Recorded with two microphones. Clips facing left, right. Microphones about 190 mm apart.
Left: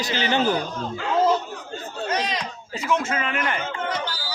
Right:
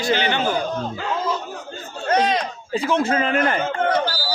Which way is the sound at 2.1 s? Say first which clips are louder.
Right 8 dB; 55° right (ahead or behind).